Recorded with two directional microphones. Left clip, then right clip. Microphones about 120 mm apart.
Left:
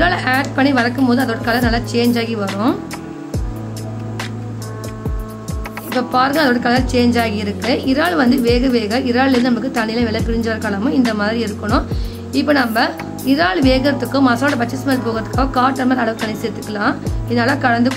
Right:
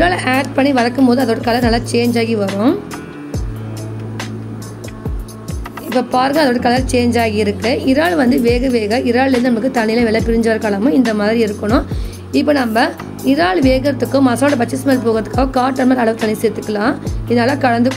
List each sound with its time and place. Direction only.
0.0 s speech: 25° right (ahead or behind)
6.1 s speech: 30° right (ahead or behind)